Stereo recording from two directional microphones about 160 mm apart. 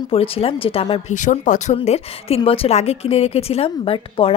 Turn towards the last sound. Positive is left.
turn(degrees=35)  # may be behind; listen again after turning